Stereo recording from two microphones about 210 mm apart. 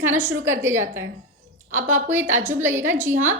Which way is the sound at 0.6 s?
10° right (ahead or behind).